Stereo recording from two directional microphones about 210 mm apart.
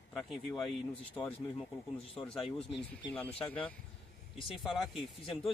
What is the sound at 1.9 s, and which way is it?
Speech, 25° left (ahead or behind).